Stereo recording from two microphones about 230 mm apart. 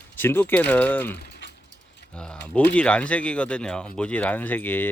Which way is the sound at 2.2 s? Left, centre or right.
Centre.